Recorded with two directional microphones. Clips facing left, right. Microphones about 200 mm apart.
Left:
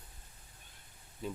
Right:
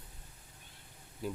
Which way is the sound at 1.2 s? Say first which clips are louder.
Right 2 dB; 5° right (ahead or behind).